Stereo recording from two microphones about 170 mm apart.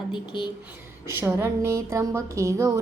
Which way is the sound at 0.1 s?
30° left (ahead or behind).